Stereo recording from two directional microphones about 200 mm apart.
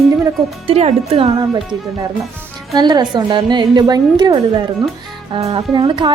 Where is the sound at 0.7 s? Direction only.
30° right (ahead or behind).